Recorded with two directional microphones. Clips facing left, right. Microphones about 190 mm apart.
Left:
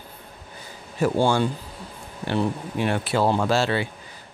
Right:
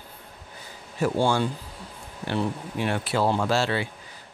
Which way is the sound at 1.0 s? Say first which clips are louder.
Left 3 dB; 55° left (ahead or behind).